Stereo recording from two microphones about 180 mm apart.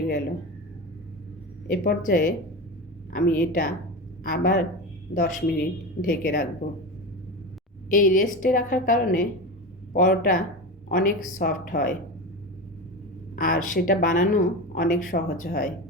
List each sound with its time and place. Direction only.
1.6 s speech: 50° left (ahead or behind)
7.9 s speech: 50° left (ahead or behind)
13.3 s speech: 50° left (ahead or behind)